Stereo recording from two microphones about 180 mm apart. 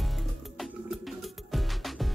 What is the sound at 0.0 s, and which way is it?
Music, centre (ahead or behind).